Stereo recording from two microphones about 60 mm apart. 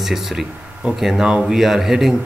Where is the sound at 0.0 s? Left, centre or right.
Centre.